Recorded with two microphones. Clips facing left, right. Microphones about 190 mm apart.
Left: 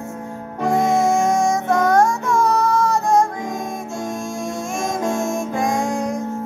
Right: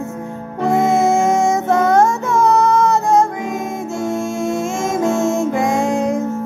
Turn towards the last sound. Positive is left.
turn(degrees=-25)  # may be behind; listen again after turning